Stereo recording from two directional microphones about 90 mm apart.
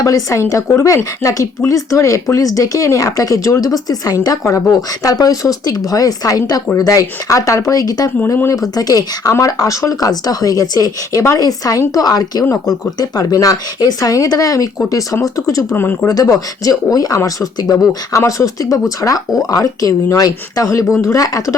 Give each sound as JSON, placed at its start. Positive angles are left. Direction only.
{"t": 0.0, "sound": "speech", "side_deg": 40}
{"t": 15.7, "sound": "speech", "side_deg": 25}
{"t": 16.0, "sound": "speech", "side_deg": 40}